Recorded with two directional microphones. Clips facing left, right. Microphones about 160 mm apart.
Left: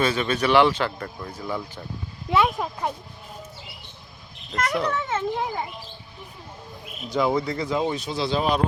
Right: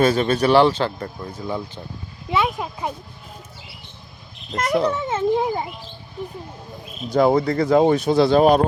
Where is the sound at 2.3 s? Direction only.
Centre (ahead or behind).